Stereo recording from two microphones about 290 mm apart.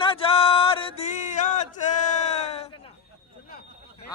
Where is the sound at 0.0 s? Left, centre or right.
Centre.